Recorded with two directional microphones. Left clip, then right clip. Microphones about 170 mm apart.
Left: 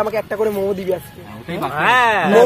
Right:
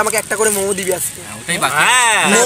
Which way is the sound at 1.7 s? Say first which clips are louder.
Right 1 dB; centre (ahead or behind).